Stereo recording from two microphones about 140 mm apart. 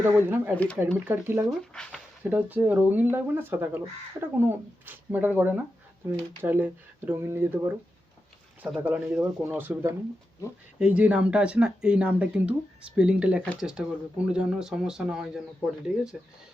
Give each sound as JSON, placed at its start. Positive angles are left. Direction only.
{"t": 0.0, "sound": "speech", "side_deg": -15}
{"t": 0.5, "sound": "speech", "side_deg": 10}
{"t": 0.9, "sound": "speech", "side_deg": -15}
{"t": 1.5, "sound": "speech", "side_deg": 5}
{"t": 2.3, "sound": "speech", "side_deg": -10}
{"t": 8.6, "sound": "speech", "side_deg": -5}
{"t": 9.1, "sound": "speech", "side_deg": -20}